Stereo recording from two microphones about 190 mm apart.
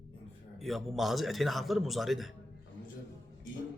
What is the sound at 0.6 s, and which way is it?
A man's voice, centre (ahead or behind).